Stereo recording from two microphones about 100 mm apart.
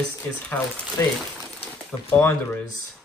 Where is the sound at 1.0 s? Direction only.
30° left (ahead or behind).